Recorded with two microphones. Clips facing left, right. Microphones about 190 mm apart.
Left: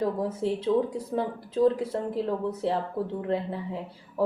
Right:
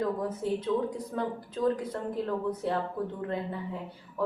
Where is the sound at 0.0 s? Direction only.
30° left (ahead or behind).